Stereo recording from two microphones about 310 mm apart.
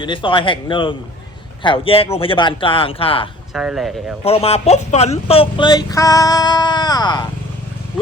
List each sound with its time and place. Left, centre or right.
0.0 s speech: centre
3.5 s speech: centre
4.2 s speech: centre